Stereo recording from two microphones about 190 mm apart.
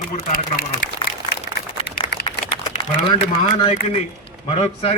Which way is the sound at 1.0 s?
25° left (ahead or behind).